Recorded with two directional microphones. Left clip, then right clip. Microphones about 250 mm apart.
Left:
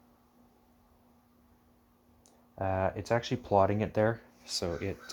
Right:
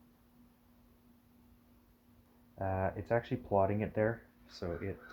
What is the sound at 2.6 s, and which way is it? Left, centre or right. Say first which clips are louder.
Speech: left 5 dB; left.